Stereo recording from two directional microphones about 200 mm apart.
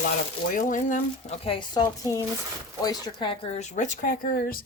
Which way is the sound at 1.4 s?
25° left (ahead or behind).